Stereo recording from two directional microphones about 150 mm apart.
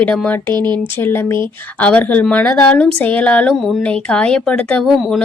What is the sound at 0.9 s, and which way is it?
Speech, 15° left (ahead or behind).